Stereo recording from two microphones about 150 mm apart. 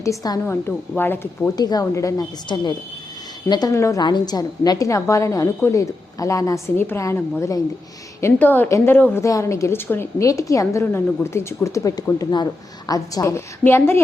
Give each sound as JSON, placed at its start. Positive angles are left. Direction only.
{"t": 0.0, "sound": "a woman's voice", "side_deg": 20}
{"t": 1.5, "sound": "a woman's voice", "side_deg": 25}